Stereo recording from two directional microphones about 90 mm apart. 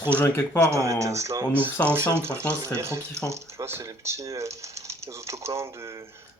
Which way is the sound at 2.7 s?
30° right (ahead or behind).